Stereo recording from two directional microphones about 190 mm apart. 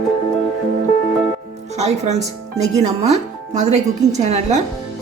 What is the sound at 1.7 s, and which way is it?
Speech, 35° right (ahead or behind).